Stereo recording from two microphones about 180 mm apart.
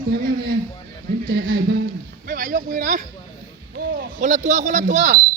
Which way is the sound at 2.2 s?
50° right (ahead or behind).